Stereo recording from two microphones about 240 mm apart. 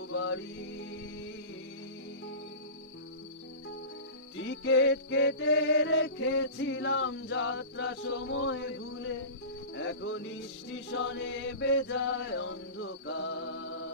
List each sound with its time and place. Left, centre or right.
0.1 s music: left
4.4 s music: left